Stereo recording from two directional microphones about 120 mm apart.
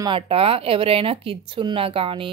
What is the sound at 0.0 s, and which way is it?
A woman's voice, 50° right (ahead or behind).